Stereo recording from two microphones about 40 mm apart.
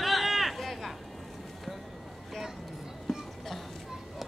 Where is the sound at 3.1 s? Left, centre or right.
Centre.